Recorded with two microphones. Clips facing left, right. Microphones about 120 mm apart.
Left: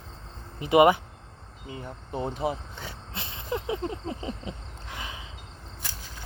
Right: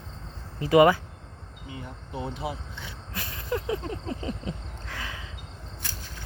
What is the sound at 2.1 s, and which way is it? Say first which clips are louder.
Speech: left 4 dB; 45° left (ahead or behind).